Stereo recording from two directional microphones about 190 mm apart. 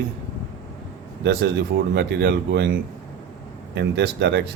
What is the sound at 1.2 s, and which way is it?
Speech, 65° right (ahead or behind).